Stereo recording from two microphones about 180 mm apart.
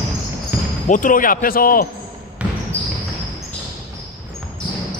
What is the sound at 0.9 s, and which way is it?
Speech, 45° left (ahead or behind).